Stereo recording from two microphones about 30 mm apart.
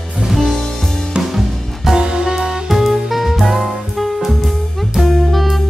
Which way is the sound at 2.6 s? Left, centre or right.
Centre.